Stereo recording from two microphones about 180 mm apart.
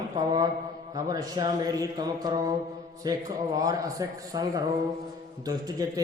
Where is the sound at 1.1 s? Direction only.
20° right (ahead or behind).